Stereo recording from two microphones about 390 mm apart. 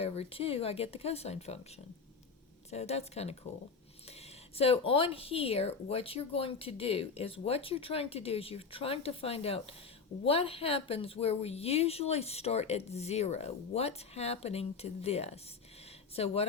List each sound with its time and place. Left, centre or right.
0.0 s speech: centre
2.6 s speech: centre